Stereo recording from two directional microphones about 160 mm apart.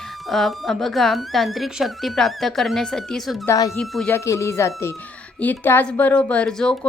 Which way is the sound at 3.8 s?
5° left (ahead or behind).